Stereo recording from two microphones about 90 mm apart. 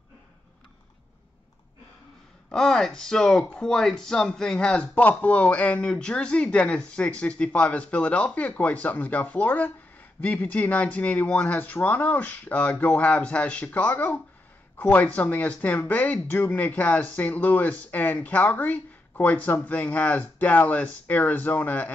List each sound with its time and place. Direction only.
2.5 s speech: 5° left (ahead or behind)